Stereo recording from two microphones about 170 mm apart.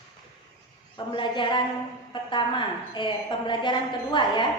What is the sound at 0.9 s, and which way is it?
A woman's voice, 30° left (ahead or behind).